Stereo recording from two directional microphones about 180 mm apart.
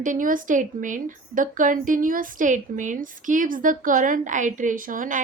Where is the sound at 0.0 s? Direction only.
45° right (ahead or behind).